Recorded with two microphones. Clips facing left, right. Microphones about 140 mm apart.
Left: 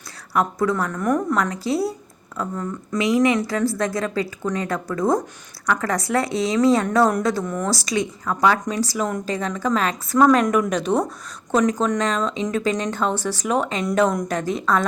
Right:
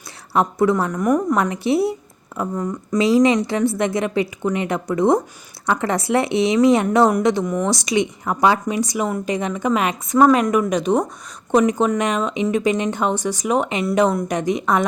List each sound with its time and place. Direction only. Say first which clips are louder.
0.3 s speech: right 3 dB; 25° right (ahead or behind)
1.4 s a woman's voice: right 4 dB; 25° right (ahead or behind)
10.2 s speech: right 1 dB; 5° right (ahead or behind)